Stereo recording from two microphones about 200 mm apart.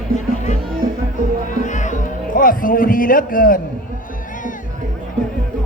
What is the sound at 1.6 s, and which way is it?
Music, 40° left (ahead or behind).